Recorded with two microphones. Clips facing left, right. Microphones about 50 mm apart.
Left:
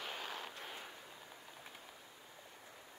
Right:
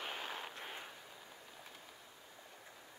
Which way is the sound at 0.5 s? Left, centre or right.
Centre.